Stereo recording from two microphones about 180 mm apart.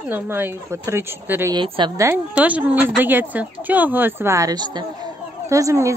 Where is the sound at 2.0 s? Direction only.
10° right (ahead or behind).